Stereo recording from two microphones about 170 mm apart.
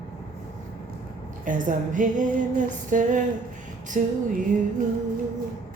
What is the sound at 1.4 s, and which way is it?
Speech, 50° right (ahead or behind).